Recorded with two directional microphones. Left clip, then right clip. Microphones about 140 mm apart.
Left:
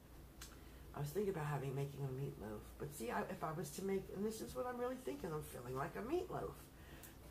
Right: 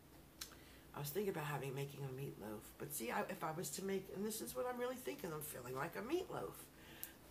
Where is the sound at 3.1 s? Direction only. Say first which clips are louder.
Right 1 dB; 30° right (ahead or behind).